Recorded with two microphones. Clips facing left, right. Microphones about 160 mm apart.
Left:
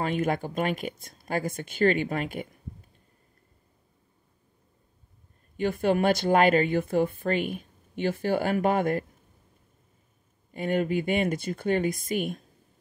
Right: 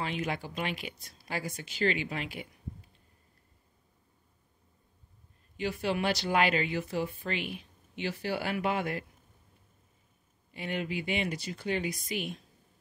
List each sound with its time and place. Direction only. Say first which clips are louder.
0.0 s speech: left 7 dB; 50° left (ahead or behind)
5.6 s speech: left 7 dB; 50° left (ahead or behind)
10.5 s speech: left 9 dB; 45° left (ahead or behind)